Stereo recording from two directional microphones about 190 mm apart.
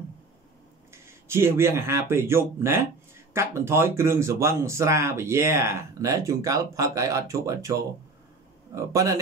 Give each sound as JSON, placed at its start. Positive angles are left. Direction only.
{"t": 1.0, "sound": "speech", "side_deg": -15}